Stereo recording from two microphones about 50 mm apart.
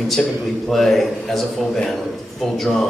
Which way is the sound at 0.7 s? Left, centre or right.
Centre.